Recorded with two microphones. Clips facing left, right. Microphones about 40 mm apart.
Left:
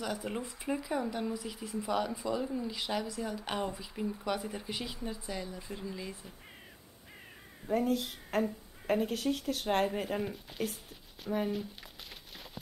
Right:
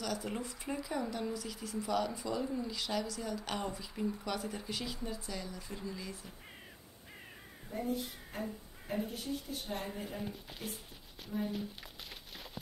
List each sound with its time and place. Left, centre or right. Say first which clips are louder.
0.0 s speech: left 2 dB; centre
7.7 s a woman's voice: left 7 dB; left
11.2 s speech: left 5 dB; left